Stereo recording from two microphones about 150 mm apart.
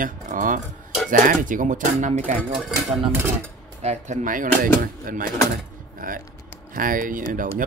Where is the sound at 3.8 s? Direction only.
50° right (ahead or behind).